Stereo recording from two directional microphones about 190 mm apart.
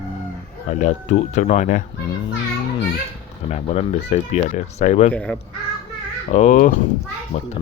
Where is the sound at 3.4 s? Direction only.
35° left (ahead or behind).